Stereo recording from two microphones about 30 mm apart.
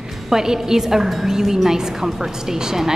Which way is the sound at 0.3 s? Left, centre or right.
Centre.